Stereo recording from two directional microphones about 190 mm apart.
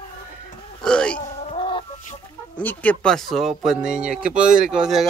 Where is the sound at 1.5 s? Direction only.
25° left (ahead or behind).